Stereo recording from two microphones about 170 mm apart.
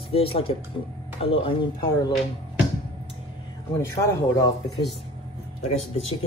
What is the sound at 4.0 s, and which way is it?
Speech, 15° left (ahead or behind).